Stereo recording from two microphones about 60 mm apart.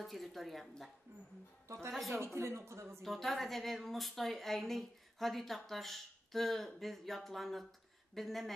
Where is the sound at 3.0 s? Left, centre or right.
Centre.